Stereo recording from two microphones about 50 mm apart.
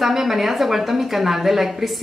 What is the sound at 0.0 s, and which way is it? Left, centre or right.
A woman's voice, centre.